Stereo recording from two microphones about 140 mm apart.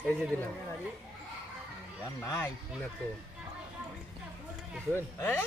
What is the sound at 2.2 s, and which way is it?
Speech, 20° left (ahead or behind).